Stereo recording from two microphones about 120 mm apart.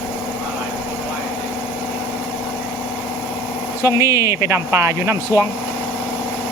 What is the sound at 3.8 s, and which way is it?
Speech, 25° right (ahead or behind).